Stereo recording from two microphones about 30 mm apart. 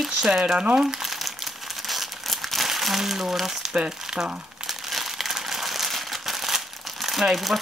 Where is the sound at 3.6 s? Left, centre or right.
Centre.